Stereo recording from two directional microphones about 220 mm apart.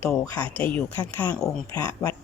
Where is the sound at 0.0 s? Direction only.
10° left (ahead or behind).